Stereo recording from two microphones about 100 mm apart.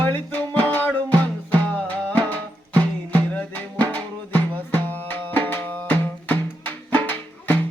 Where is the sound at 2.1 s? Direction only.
15° left (ahead or behind).